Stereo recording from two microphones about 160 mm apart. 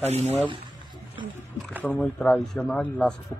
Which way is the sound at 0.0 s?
40° right (ahead or behind).